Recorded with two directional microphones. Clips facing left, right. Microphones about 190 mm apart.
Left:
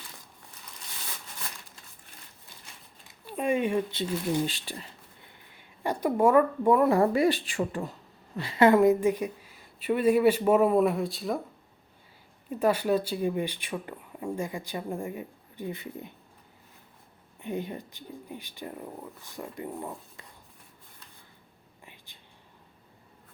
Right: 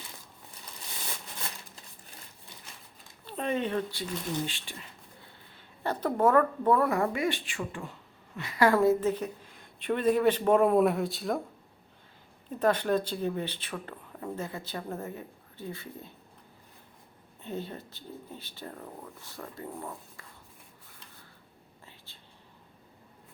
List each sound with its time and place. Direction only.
3.2 s a sound: 10° left (ahead or behind)
4.4 s speech: 40° left (ahead or behind)
5.2 s a sound: 15° left (ahead or behind)
6.8 s speech: 30° left (ahead or behind)
8.4 s speech: 25° left (ahead or behind); by 11.3 s centre (ahead or behind)
12.5 s speech: 10° left (ahead or behind)
17.4 s speech: 15° left (ahead or behind)
21.8 s whispering: 15° left (ahead or behind)